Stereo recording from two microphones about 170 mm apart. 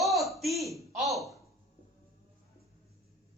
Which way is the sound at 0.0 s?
Centre (ahead or behind).